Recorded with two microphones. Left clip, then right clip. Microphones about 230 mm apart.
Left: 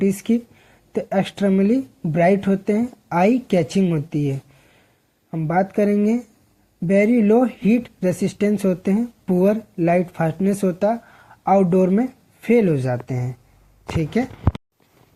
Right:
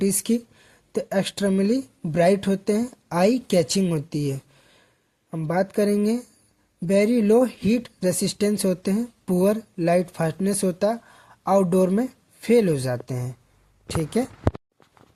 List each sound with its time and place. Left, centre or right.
0.0 s speech: right
13.1 s speech: right